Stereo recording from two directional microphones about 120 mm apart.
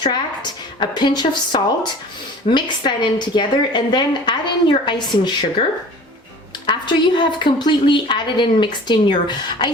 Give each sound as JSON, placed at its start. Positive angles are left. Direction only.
{"t": 0.8, "sound": "a woman's voice", "side_deg": 40}
{"t": 6.7, "sound": "a woman's voice", "side_deg": 40}